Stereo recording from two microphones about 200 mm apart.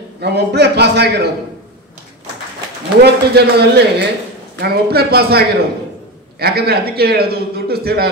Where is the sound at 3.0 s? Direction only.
55° right (ahead or behind).